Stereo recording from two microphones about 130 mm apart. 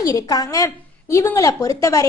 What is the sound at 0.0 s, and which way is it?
Speech, 25° left (ahead or behind).